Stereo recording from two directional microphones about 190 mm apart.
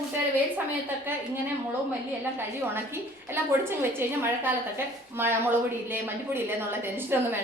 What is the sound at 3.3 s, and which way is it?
A woman's voice, 10° right (ahead or behind).